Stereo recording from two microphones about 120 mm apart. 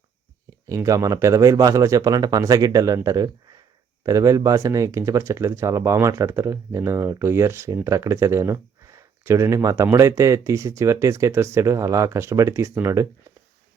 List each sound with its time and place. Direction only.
0.7 s speech: 25° right (ahead or behind)